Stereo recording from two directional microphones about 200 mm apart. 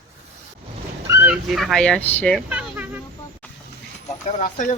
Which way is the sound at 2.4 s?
5° right (ahead or behind).